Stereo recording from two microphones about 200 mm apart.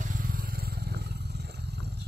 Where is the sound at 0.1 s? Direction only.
45° right (ahead or behind).